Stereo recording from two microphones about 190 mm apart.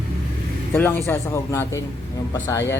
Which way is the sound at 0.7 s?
10° left (ahead or behind).